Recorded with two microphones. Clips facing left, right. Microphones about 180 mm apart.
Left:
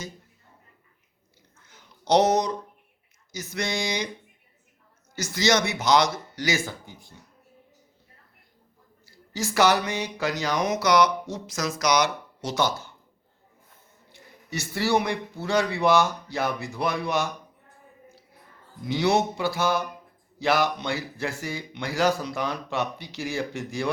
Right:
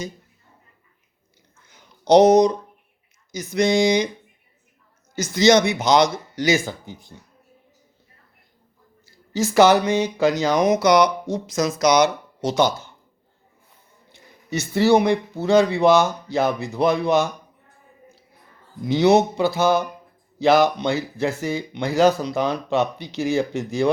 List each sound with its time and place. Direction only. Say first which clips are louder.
1.6 s a sound: right 7 dB; 15° right (ahead or behind)
3.3 s speech: right 11 dB; 20° right (ahead or behind)
5.1 s speech: right 8 dB; 20° right (ahead or behind)
9.3 s speech: right 7 dB; 20° right (ahead or behind)
14.1 s speech: right 7 dB; 20° right (ahead or behind)
18.9 s speech: right 7 dB; 20° right (ahead or behind)